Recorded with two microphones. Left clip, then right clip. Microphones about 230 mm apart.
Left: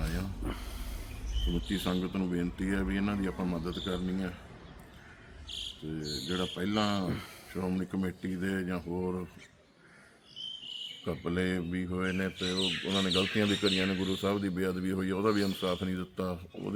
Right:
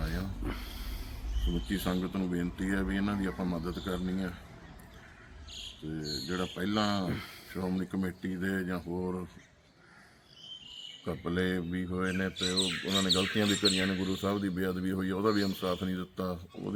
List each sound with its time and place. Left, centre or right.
0.2 s a sound: centre
1.6 s speech: centre
6.2 s speech: centre
11.0 s speech: centre